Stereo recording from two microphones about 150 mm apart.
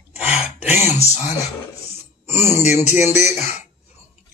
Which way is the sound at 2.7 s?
50° left (ahead or behind).